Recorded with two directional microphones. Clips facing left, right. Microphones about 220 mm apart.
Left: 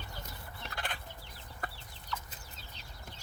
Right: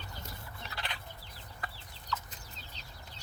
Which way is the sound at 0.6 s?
50° left (ahead or behind).